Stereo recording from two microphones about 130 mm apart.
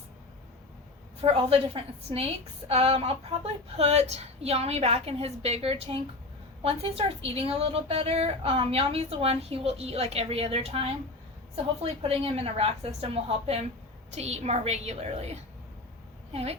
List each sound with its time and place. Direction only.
1.4 s a woman's voice: 45° right (ahead or behind)
16.3 s a woman's voice: 50° right (ahead or behind)